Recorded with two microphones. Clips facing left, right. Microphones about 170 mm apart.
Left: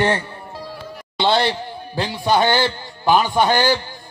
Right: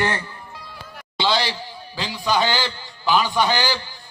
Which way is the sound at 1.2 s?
55° left (ahead or behind).